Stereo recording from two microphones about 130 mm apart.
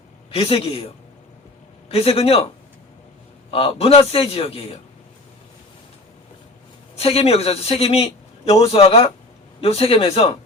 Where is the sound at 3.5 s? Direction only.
45° left (ahead or behind).